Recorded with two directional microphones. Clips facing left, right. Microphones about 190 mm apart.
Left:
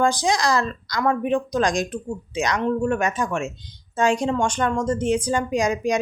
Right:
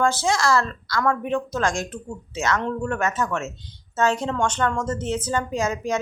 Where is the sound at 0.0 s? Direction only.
15° left (ahead or behind).